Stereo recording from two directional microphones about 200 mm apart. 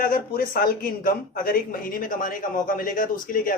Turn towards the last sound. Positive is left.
turn(degrees=45)  # may be behind; listen again after turning